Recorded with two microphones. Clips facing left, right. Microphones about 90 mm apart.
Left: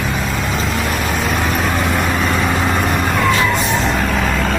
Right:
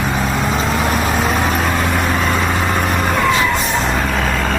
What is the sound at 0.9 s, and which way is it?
Vehicle, centre (ahead or behind).